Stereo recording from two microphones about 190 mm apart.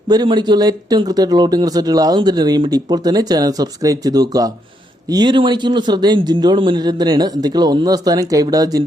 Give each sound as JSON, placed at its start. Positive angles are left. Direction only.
{"t": 0.1, "sound": "speech", "side_deg": -20}